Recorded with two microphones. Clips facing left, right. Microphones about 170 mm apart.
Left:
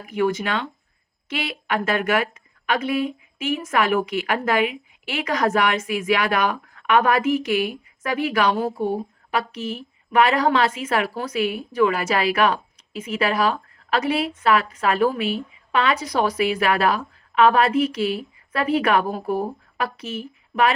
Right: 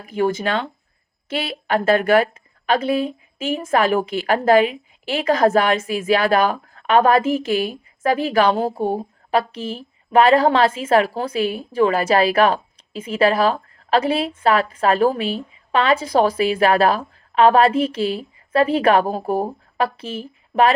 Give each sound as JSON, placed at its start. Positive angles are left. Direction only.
{"t": 0.0, "sound": "a woman's voice", "side_deg": -30}